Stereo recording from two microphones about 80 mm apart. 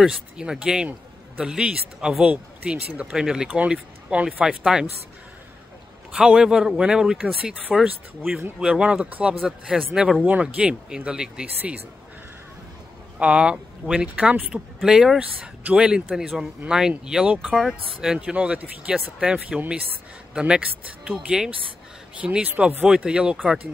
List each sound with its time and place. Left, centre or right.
0.0 s speech: centre
6.1 s speech: centre
9.3 s speech: centre
10.2 s speech: centre
13.2 s speech: centre
22.8 s speech: centre